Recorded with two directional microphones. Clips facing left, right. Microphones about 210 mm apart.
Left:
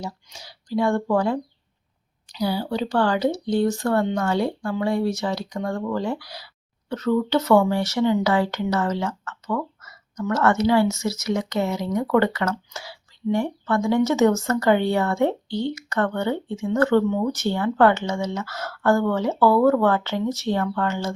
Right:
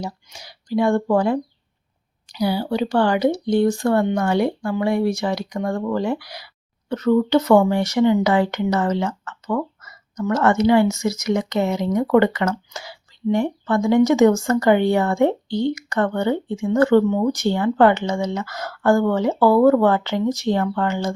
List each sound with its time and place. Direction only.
0.0 s speech: 15° right (ahead or behind)